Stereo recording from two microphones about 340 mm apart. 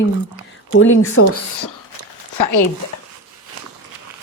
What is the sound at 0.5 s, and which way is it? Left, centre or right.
Speech, left.